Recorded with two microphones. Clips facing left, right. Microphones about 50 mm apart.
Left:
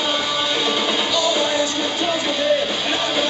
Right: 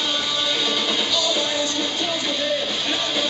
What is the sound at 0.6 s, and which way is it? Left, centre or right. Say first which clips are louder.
Music: left 3 dB; centre.